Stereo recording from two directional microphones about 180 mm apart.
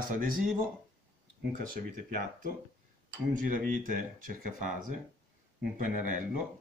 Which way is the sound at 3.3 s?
50° right (ahead or behind).